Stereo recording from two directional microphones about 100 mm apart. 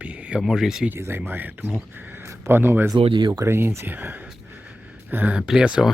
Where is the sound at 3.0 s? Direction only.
55° right (ahead or behind).